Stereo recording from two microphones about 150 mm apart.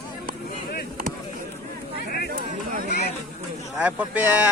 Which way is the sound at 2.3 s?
60° right (ahead or behind).